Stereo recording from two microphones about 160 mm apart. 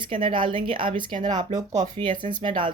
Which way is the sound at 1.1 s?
50° right (ahead or behind).